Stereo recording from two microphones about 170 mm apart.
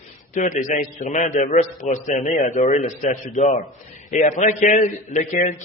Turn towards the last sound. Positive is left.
turn(degrees=45)  # may be behind; listen again after turning